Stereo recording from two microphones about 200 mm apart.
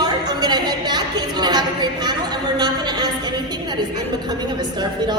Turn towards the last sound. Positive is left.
turn(degrees=-20)  # may be behind; listen again after turning